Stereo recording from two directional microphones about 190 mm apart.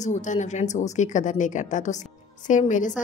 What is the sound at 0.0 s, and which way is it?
A woman's voice, 40° left (ahead or behind).